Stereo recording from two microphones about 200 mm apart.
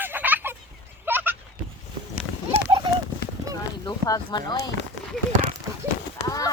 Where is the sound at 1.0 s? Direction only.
10° right (ahead or behind).